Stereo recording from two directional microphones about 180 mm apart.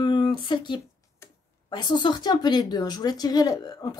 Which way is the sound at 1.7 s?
25° left (ahead or behind).